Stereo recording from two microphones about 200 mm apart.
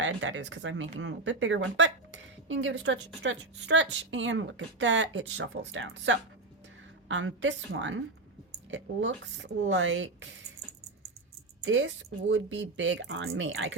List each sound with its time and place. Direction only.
0.0 s speech: 70° right (ahead or behind)
11.6 s speech: 70° right (ahead or behind)